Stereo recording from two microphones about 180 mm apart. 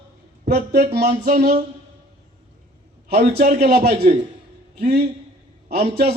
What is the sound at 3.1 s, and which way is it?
Speech, 60° right (ahead or behind).